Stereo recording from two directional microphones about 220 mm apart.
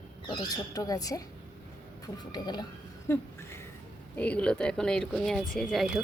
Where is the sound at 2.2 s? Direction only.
20° left (ahead or behind).